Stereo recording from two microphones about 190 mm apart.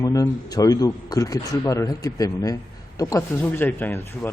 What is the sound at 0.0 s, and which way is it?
A man's voice, 20° left (ahead or behind).